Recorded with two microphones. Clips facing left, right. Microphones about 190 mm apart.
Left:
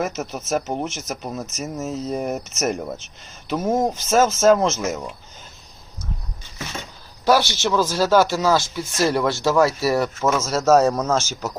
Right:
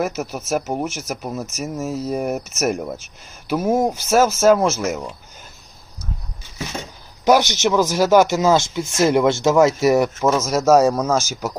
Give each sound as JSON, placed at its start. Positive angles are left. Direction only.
{"t": 0.2, "sound": "speech", "side_deg": -10}
{"t": 1.7, "sound": "speech", "side_deg": 0}
{"t": 7.3, "sound": "speech", "side_deg": -20}